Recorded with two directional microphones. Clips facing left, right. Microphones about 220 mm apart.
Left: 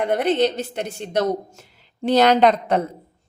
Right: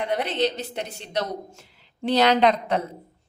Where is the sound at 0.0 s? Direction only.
50° left (ahead or behind).